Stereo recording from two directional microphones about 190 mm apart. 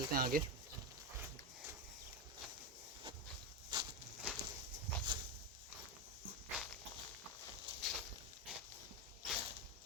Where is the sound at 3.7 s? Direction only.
25° right (ahead or behind).